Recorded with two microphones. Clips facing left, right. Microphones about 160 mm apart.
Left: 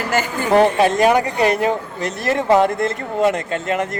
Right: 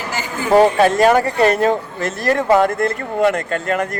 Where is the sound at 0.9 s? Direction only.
15° left (ahead or behind).